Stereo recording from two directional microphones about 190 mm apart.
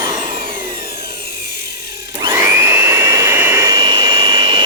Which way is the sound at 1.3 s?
55° left (ahead or behind).